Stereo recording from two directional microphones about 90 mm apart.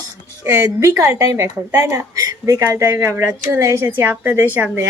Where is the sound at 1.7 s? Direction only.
20° right (ahead or behind).